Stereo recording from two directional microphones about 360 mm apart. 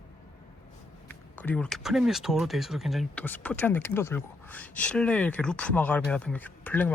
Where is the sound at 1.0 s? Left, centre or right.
Centre.